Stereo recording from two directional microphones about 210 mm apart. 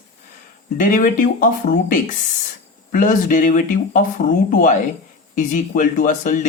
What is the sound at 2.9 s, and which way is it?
Speech, 40° left (ahead or behind).